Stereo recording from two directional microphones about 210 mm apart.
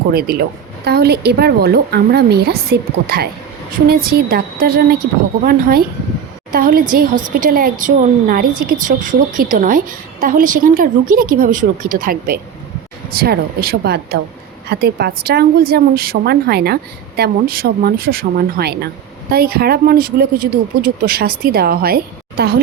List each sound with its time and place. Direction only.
0.1 s speech: 45° right (ahead or behind)